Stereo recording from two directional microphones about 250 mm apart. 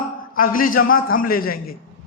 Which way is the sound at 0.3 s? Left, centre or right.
Left.